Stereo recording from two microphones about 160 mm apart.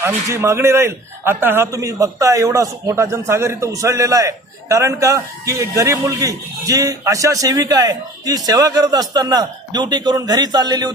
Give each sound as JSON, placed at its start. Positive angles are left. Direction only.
{"t": 0.0, "sound": "a man's voice", "side_deg": -15}